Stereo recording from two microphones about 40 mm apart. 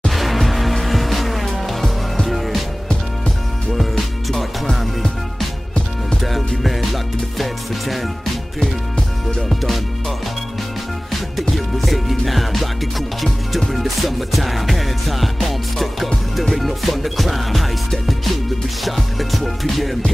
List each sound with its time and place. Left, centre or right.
0.1 s music: centre
3.7 s music: centre
6.2 s music: centre
8.5 s music: left
9.5 s music: centre
11.5 s music: centre